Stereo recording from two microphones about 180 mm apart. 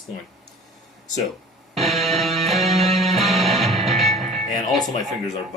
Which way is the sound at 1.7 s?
Centre (ahead or behind).